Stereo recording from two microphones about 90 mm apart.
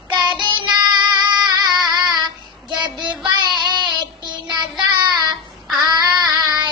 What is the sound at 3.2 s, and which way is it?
Child singing, 55° right (ahead or behind).